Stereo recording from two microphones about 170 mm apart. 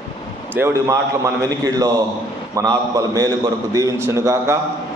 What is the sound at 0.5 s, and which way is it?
A man's voice, 15° right (ahead or behind).